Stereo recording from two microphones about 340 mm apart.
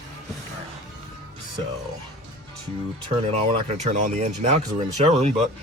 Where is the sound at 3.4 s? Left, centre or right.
Centre.